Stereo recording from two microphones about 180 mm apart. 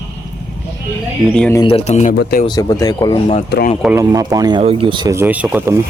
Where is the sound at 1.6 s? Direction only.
35° left (ahead or behind).